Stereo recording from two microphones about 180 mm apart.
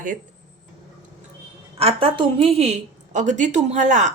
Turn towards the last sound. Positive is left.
turn(degrees=-40)  # may be behind; listen again after turning